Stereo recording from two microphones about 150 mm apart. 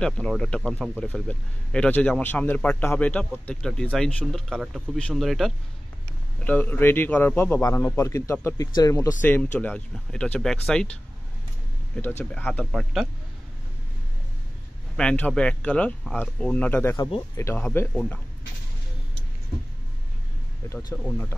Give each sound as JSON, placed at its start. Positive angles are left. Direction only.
{"t": 0.0, "sound": "a man's voice", "side_deg": 5}
{"t": 6.4, "sound": "a man's voice", "side_deg": 10}
{"t": 12.0, "sound": "a man's voice", "side_deg": 15}
{"t": 12.7, "sound": "speech", "side_deg": 0}
{"t": 15.0, "sound": "a man's voice", "side_deg": 10}
{"t": 16.9, "sound": "speech", "side_deg": 25}
{"t": 17.6, "sound": "a man's voice", "side_deg": 10}
{"t": 20.7, "sound": "a man's voice", "side_deg": 15}